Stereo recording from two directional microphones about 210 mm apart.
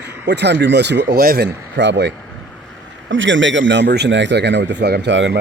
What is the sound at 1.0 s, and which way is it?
Speech, 45° right (ahead or behind).